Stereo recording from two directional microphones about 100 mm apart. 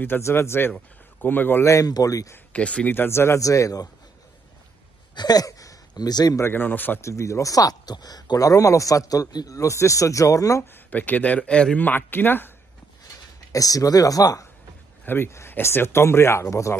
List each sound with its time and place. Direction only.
0.0 s speech: 25° left (ahead or behind)
2.3 s speech: 10° left (ahead or behind)
2.9 s speech: 25° left (ahead or behind)
5.1 s speech: 40° left (ahead or behind)
6.4 s speech: 20° left (ahead or behind)
7.0 s speech: 30° left (ahead or behind)
10.6 s speech: 20° left (ahead or behind)
13.5 s speech: 35° left (ahead or behind)
15.0 s speech: 25° left (ahead or behind)